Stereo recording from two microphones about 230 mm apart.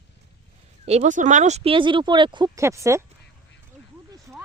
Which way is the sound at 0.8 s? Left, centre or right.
Right.